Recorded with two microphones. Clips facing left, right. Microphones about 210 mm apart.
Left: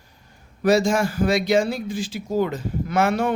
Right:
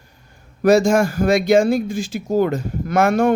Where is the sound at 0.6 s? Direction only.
45° right (ahead or behind).